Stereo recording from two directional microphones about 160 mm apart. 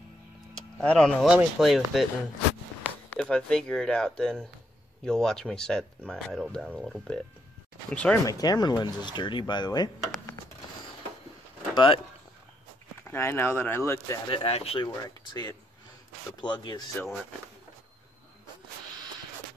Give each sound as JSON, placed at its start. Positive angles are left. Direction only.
{"t": 0.7, "sound": "speech", "side_deg": 5}
{"t": 3.1, "sound": "speech", "side_deg": 5}
{"t": 8.3, "sound": "speech", "side_deg": 25}
{"t": 11.7, "sound": "speech", "side_deg": 30}
{"t": 13.0, "sound": "speech", "side_deg": 15}
{"t": 14.3, "sound": "speech", "side_deg": 35}
{"t": 15.0, "sound": "speech", "side_deg": 25}